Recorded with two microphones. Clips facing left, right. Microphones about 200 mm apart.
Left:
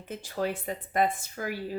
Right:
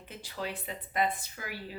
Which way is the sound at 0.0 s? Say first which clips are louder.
Left 7 dB; 45° left (ahead or behind).